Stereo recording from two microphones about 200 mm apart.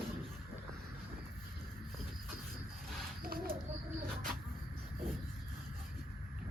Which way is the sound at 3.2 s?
50° right (ahead or behind).